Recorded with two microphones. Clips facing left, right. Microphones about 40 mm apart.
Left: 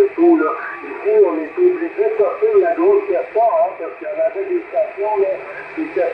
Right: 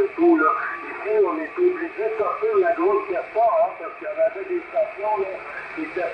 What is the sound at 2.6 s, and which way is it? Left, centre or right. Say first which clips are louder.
Speech: left 5 dB; centre.